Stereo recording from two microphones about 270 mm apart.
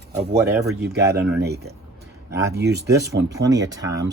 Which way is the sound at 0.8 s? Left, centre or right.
Right.